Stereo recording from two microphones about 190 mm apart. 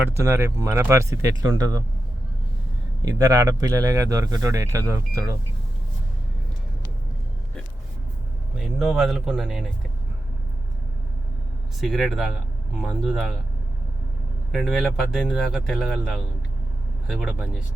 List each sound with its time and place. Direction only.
0.0 s speech: 15° right (ahead or behind)
3.0 s speech: 15° right (ahead or behind)
8.5 s speech: centre (ahead or behind)
11.8 s speech: centre (ahead or behind)
14.5 s speech: centre (ahead or behind)